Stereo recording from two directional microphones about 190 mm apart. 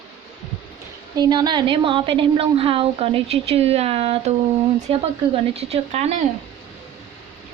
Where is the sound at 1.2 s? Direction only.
20° right (ahead or behind).